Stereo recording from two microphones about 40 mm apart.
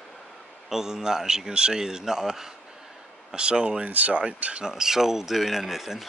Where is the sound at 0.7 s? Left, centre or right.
Centre.